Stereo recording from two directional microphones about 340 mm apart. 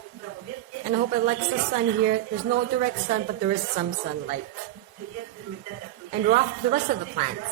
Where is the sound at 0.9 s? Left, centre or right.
Right.